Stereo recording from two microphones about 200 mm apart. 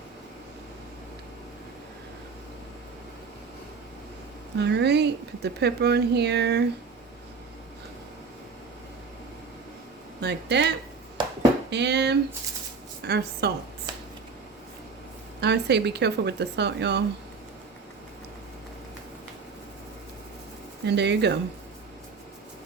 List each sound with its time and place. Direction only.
4.5 s speech: 60° right (ahead or behind)
10.2 s speech: 55° right (ahead or behind)
11.7 s a woman's voice: 60° right (ahead or behind)
15.4 s speech: 55° right (ahead or behind)
20.8 s speech: 60° right (ahead or behind)